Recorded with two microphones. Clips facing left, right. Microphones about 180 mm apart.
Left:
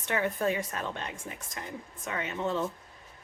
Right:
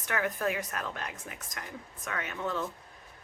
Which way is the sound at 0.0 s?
25° left (ahead or behind).